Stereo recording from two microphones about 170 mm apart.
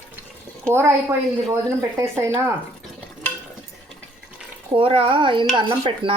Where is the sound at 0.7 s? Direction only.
15° right (ahead or behind).